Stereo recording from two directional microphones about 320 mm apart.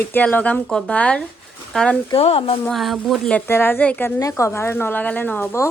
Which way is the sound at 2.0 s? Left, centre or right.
Centre.